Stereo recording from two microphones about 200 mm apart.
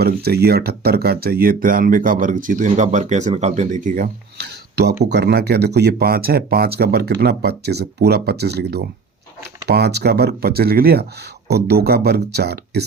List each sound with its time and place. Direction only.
0.0 s speech: 50° right (ahead or behind)
5.1 s speech: 55° right (ahead or behind)